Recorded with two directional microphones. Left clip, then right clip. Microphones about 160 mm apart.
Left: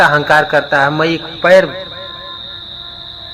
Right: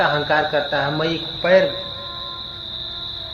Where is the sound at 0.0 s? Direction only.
35° left (ahead or behind).